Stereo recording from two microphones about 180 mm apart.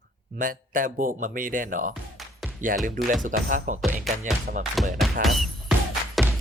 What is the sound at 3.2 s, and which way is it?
Speech, 50° right (ahead or behind).